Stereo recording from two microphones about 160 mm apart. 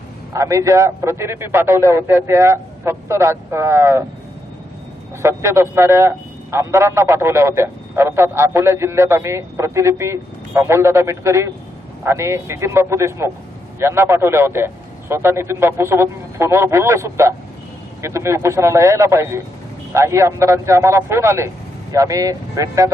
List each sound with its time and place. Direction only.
0.3 s a man's voice: 20° right (ahead or behind)
5.2 s a man's voice: 15° right (ahead or behind)